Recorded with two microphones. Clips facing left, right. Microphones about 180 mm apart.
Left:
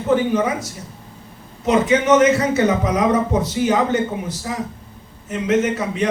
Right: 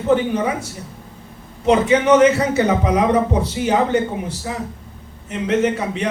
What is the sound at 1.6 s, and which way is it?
Speech, 35° right (ahead or behind).